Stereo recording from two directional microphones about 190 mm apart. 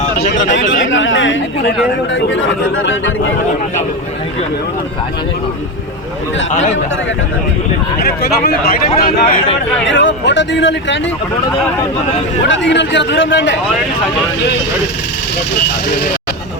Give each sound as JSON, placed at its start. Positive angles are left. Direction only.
{"t": 0.0, "sound": "a sound", "side_deg": 40}
{"t": 0.9, "sound": "speech", "side_deg": 90}
{"t": 6.5, "sound": "speech", "side_deg": 40}
{"t": 7.9, "sound": "speech", "side_deg": 55}
{"t": 9.8, "sound": "speech", "side_deg": 70}
{"t": 12.5, "sound": "speech", "side_deg": 70}